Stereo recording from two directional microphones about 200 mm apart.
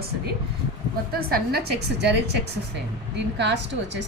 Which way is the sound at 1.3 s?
55° right (ahead or behind).